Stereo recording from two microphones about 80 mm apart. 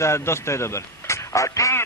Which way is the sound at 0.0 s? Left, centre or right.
Left.